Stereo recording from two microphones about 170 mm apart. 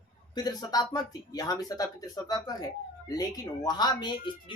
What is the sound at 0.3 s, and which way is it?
A man's voice, 20° left (ahead or behind).